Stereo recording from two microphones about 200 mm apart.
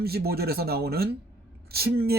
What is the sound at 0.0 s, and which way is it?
Speech, 50° right (ahead or behind).